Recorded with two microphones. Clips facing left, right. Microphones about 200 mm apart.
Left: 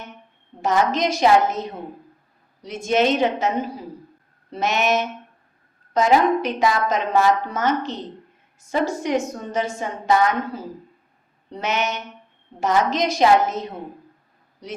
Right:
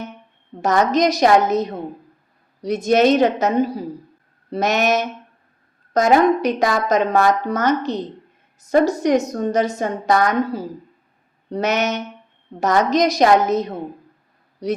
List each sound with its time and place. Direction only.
0.9 s a woman's voice: 40° right (ahead or behind)
11.6 s a woman's voice: 40° right (ahead or behind)